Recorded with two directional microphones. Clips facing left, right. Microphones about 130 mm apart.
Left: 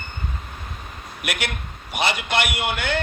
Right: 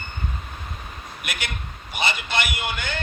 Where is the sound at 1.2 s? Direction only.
60° left (ahead or behind).